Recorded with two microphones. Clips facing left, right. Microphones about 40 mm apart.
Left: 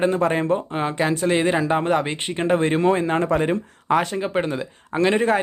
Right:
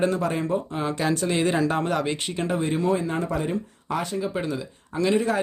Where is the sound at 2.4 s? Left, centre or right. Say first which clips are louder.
Left 6 dB; left.